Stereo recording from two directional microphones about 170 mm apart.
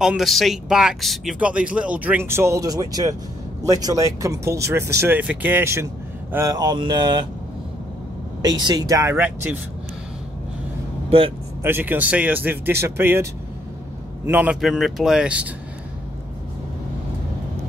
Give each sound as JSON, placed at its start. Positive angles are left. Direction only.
{"t": 0.0, "sound": "speech", "side_deg": 0}
{"t": 8.4, "sound": "speech", "side_deg": -25}
{"t": 11.1, "sound": "speech", "side_deg": -35}
{"t": 11.6, "sound": "speech", "side_deg": -10}